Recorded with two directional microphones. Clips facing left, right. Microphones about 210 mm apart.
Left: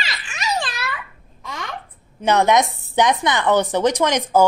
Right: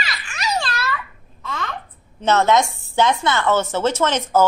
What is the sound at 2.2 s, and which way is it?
Speech, 15° left (ahead or behind).